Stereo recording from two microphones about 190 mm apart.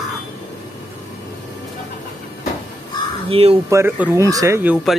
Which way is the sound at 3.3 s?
30° right (ahead or behind).